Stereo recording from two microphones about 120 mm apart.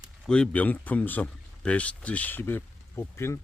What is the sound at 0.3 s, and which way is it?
Speech, 5° left (ahead or behind).